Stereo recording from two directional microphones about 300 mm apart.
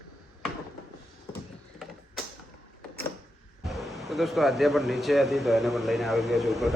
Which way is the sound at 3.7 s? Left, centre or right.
Centre.